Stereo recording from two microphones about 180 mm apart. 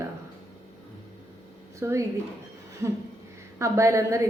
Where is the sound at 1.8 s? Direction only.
15° right (ahead or behind).